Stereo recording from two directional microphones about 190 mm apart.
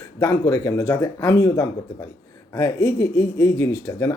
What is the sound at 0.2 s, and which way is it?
Speech, 15° left (ahead or behind).